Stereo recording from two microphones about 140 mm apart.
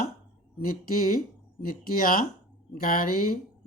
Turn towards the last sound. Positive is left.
turn(degrees=80)